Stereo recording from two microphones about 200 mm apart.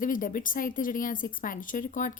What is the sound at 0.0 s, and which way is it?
A woman's voice, 45° left (ahead or behind).